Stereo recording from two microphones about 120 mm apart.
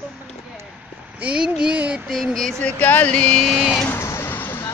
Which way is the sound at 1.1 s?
10° right (ahead or behind).